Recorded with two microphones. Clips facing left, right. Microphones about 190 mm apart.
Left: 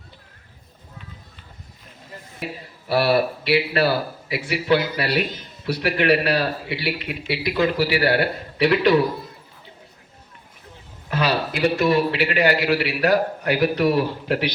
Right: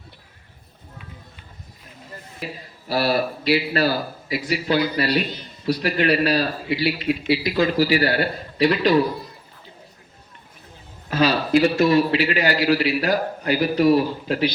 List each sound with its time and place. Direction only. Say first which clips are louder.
2.4 s a man's voice: left 2 dB; 60° left (ahead or behind)
11.1 s a man's voice: right 5 dB; 60° left (ahead or behind)